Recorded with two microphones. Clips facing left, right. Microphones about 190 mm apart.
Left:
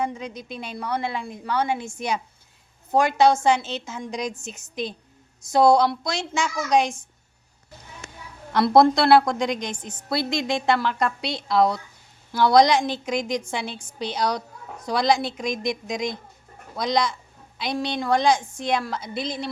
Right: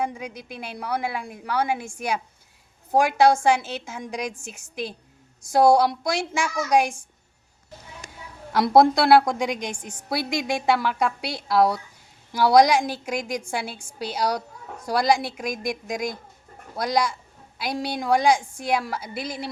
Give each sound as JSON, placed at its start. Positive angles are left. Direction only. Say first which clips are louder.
{"t": 0.0, "sound": "a woman's voice", "louder": "left 1 dB", "side_deg": -10}
{"t": 8.5, "sound": "a woman's voice", "louder": "even", "side_deg": -10}